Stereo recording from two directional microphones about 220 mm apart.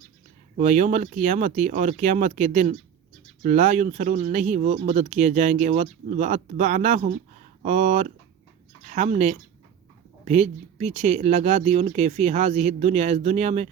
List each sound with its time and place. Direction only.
0.5 s speech: 30° right (ahead or behind)